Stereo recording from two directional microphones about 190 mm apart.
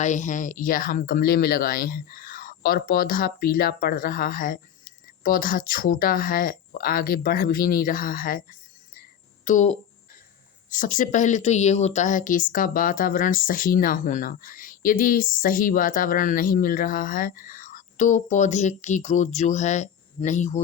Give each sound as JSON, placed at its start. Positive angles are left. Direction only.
{"t": 0.0, "sound": "speech", "side_deg": 40}
{"t": 9.4, "sound": "speech", "side_deg": 40}